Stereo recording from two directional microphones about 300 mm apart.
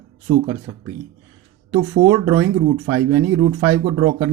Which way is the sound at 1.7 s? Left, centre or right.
Right.